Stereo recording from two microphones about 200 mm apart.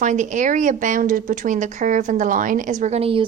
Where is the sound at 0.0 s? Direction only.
40° right (ahead or behind).